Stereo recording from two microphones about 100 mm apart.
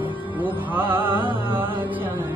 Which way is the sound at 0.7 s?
20° right (ahead or behind).